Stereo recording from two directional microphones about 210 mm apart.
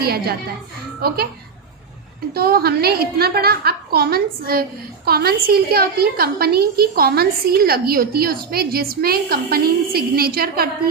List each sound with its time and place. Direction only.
0.0 s a woman's voice: 50° right (ahead or behind)
2.3 s a woman's voice: 45° right (ahead or behind)